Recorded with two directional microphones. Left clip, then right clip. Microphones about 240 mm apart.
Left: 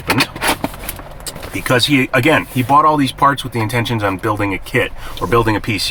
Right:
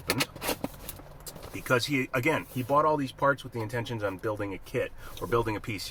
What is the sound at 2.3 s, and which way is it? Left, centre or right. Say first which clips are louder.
Speech: left 14 dB; left.